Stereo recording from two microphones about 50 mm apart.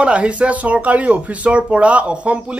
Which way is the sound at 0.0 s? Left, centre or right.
Right.